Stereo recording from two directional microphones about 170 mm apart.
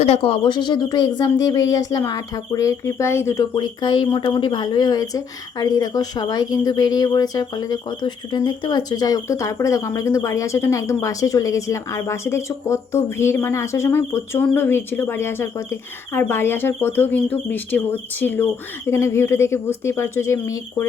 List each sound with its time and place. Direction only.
0.0 s speech: 35° left (ahead or behind); by 20.8 s 15° left (ahead or behind)